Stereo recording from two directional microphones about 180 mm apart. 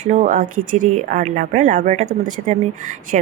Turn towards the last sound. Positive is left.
turn(degrees=-40)  # may be behind; listen again after turning